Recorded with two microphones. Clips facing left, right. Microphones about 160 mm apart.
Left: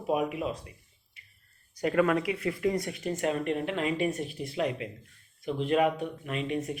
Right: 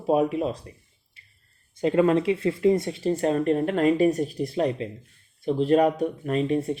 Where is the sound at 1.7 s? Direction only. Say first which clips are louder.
Right 5 dB; 25° right (ahead or behind).